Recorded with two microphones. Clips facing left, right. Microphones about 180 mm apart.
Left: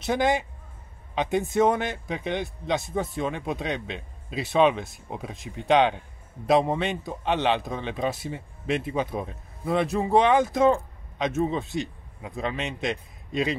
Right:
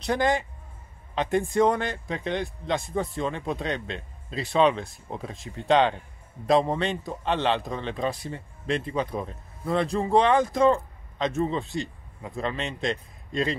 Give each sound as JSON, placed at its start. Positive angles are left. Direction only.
{"t": 0.0, "sound": "a man's voice", "side_deg": 5}
{"t": 1.3, "sound": "a man's voice", "side_deg": 5}
{"t": 2.1, "sound": "a man's voice", "side_deg": 15}
{"t": 2.6, "sound": "a man's voice", "side_deg": 5}
{"t": 5.4, "sound": "a man's voice", "side_deg": 15}